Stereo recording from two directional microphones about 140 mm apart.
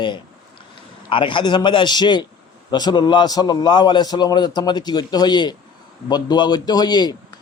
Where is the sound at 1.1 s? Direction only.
35° left (ahead or behind).